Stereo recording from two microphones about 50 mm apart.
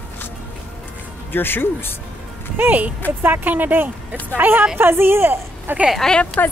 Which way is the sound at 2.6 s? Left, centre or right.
Right.